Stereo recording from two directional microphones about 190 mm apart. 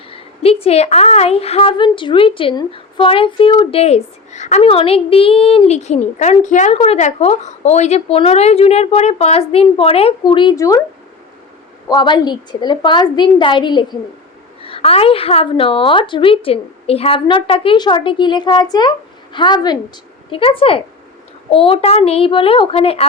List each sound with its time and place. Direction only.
0.1 s a woman's voice: 30° left (ahead or behind)
11.9 s a woman's voice: 25° left (ahead or behind)